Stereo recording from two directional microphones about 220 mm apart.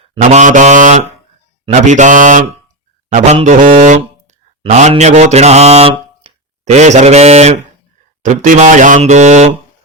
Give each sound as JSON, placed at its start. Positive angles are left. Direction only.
{"t": 0.1, "sound": "speech", "side_deg": -30}
{"t": 3.1, "sound": "mantra", "side_deg": -35}
{"t": 3.3, "sound": "speech", "side_deg": -35}